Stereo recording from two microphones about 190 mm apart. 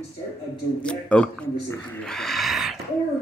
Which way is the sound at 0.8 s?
5° left (ahead or behind).